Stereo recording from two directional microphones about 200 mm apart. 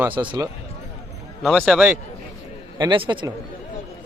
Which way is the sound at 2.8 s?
25° right (ahead or behind).